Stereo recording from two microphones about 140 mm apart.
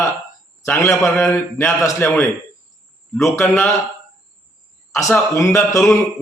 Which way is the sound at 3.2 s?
20° left (ahead or behind).